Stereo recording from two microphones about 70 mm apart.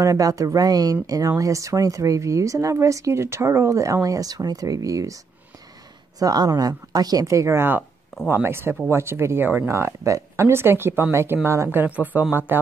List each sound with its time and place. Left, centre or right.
0.0 s a woman's voice: right
6.1 s a woman's voice: right
7.2 s speech: right
9.7 s speech: right
11.8 s speech: right